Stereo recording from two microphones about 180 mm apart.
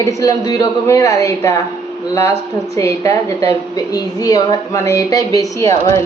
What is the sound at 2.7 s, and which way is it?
A woman's voice, 15° left (ahead or behind).